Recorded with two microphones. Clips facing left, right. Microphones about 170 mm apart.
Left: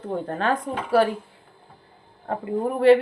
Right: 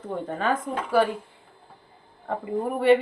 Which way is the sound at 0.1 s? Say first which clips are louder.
Left 2 dB; centre (ahead or behind).